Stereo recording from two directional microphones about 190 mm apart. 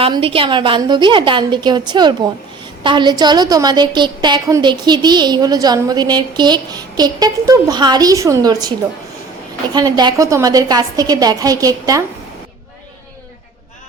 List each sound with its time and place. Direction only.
0.0 s a woman's voice: 30° right (ahead or behind)
9.7 s a woman's voice: 20° right (ahead or behind)